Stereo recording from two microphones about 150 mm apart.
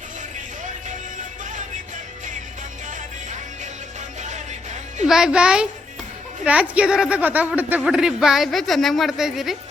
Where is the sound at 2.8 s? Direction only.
55° right (ahead or behind).